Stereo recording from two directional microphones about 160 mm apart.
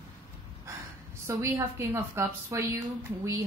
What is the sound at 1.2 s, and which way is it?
A woman's voice, 15° right (ahead or behind).